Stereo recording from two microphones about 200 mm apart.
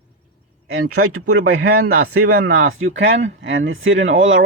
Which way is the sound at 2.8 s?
65° right (ahead or behind).